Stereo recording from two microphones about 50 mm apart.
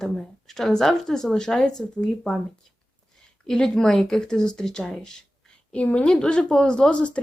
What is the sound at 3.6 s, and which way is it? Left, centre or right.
A woman's voice, centre.